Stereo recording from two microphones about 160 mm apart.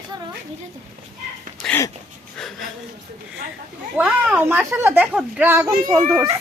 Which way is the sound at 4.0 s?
5° right (ahead or behind).